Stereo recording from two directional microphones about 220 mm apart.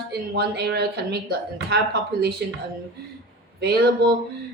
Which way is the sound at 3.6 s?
45° right (ahead or behind).